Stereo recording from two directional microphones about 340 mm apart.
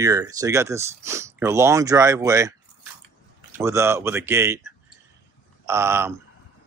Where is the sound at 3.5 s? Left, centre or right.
Centre.